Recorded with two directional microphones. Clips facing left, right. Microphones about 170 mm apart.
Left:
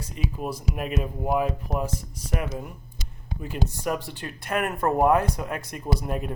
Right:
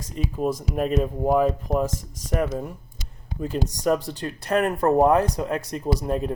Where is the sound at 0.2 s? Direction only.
35° right (ahead or behind).